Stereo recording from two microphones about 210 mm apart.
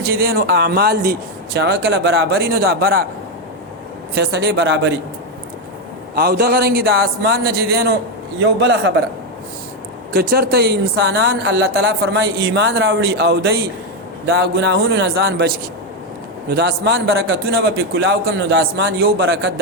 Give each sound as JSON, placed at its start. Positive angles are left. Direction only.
{"t": 0.0, "sound": "speech", "side_deg": -45}
{"t": 4.1, "sound": "speech", "side_deg": -55}
{"t": 6.1, "sound": "a man's voice", "side_deg": -45}
{"t": 10.1, "sound": "speech", "side_deg": -50}
{"t": 16.5, "sound": "speech", "side_deg": -50}